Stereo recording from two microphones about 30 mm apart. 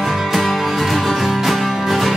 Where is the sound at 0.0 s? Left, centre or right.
Centre.